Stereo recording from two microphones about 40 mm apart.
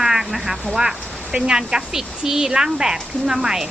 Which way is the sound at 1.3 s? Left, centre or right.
Right.